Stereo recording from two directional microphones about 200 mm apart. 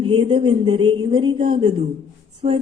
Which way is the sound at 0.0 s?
25° right (ahead or behind).